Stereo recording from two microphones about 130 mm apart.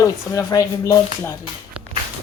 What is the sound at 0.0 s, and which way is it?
Speech, 25° left (ahead or behind).